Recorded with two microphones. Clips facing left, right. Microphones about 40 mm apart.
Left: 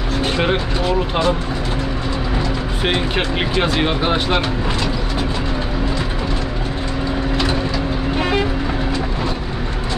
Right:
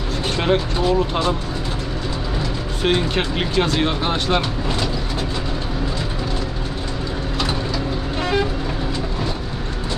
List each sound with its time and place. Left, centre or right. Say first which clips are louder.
0.4 s speech: right 3 dB; centre
2.8 s speech: right 1 dB; centre